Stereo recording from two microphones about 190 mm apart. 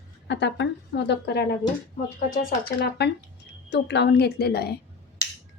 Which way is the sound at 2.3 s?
50° left (ahead or behind).